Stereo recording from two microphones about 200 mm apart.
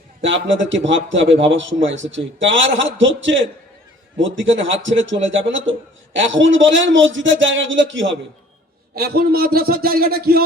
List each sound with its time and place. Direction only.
0.2 s a man's voice: 70° right (ahead or behind)
9.0 s a man's voice: 50° right (ahead or behind)